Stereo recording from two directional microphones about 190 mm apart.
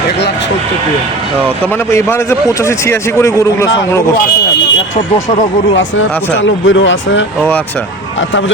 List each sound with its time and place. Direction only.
1.9 s a man's voice: 15° left (ahead or behind)
5.7 s speech: 80° left